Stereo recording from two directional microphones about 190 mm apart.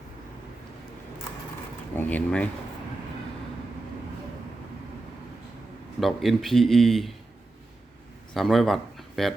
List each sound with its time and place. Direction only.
2.0 s speech: 10° left (ahead or behind)
6.0 s a man's voice: centre (ahead or behind)
8.3 s speech: centre (ahead or behind)